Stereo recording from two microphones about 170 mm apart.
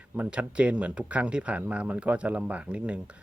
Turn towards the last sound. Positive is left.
turn(degrees=-5)  # may be behind; listen again after turning